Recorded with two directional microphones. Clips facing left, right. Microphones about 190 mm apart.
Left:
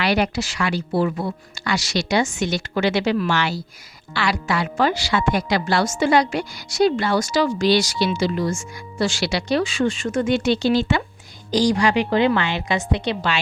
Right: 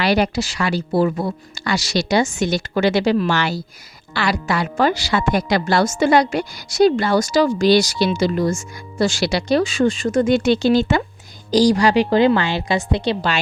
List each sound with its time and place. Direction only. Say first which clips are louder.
0.0 s a woman's voice: right 3 dB; 35° right (ahead or behind)